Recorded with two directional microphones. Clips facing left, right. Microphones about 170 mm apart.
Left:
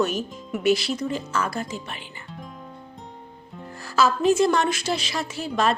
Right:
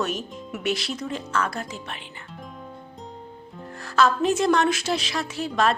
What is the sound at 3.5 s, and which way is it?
Speech, 5° left (ahead or behind).